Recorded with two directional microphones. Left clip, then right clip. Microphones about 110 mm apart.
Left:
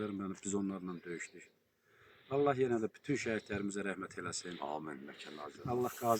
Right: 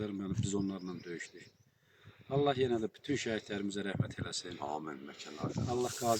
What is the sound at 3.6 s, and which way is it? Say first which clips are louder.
Speech: right 1 dB; 45° right (ahead or behind).